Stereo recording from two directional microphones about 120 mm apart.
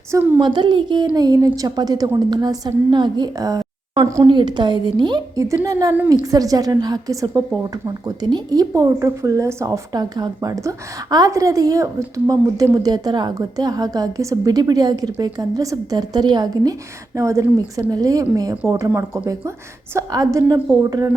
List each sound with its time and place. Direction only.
0.1 s a woman's voice: 15° right (ahead or behind)
0.3 s a woman's voice: 40° right (ahead or behind)
4.3 s a woman's voice: 40° right (ahead or behind)
6.2 s a woman's voice: 30° right (ahead or behind)